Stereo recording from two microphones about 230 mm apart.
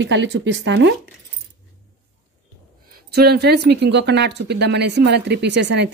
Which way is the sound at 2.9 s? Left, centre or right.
Right.